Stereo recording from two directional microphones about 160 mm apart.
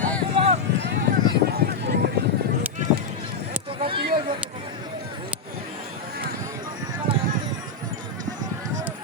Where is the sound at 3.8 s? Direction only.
35° right (ahead or behind).